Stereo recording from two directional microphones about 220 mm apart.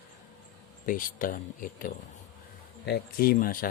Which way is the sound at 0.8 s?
40° left (ahead or behind).